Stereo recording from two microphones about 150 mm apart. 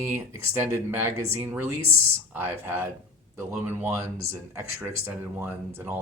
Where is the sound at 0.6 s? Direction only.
15° right (ahead or behind).